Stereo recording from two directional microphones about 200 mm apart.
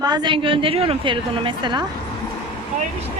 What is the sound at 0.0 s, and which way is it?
A woman's voice, 20° right (ahead or behind).